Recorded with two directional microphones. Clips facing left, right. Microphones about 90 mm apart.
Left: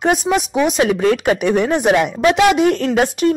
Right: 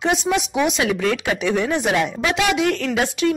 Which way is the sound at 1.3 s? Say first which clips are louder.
Left 4 dB; 50° left (ahead or behind).